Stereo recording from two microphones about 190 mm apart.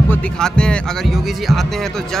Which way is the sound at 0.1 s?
5° left (ahead or behind).